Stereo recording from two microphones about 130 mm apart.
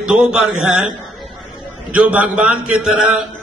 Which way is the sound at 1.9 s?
10° right (ahead or behind).